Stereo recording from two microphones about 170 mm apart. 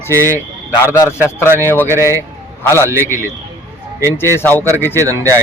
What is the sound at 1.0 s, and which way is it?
Speech, 15° left (ahead or behind).